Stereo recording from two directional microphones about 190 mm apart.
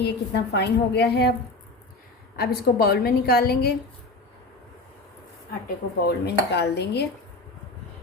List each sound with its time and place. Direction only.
0.0 s a woman's voice: 60° left (ahead or behind)
2.3 s a woman's voice: 55° left (ahead or behind)
5.6 s a woman's voice: 55° left (ahead or behind)